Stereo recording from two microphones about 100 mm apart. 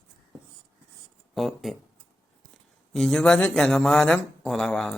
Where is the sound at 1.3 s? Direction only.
Centre (ahead or behind).